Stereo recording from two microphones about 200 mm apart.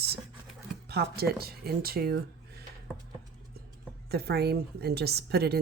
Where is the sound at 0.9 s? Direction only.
50° right (ahead or behind).